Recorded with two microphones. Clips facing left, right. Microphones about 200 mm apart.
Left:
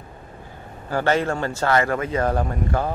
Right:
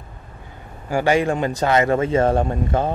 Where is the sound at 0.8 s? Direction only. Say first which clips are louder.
Right 3 dB; 10° right (ahead or behind).